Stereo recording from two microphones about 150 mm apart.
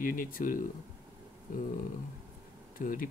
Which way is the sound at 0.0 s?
70° left (ahead or behind).